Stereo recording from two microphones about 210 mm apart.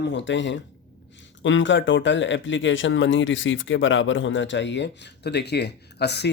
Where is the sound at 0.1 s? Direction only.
60° left (ahead or behind).